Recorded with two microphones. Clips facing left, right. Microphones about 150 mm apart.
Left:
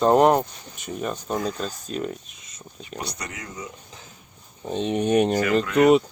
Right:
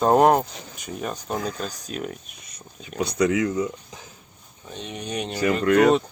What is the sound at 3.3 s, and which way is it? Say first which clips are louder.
Speech: right 15 dB; 90° right.